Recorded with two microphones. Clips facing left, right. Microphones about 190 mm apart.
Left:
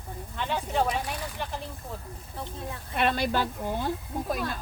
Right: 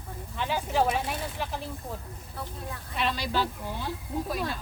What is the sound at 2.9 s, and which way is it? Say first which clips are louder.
Speech: left 3 dB; 55° left (ahead or behind).